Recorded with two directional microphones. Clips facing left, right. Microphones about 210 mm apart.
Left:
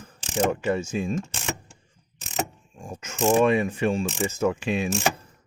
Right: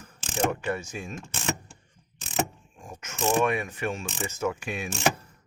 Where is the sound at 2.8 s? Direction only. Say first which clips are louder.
Left 5 dB; 30° left (ahead or behind).